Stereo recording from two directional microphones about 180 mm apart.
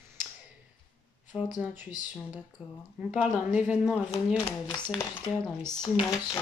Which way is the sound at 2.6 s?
10° right (ahead or behind).